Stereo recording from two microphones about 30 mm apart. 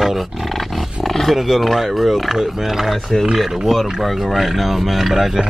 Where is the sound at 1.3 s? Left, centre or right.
Centre.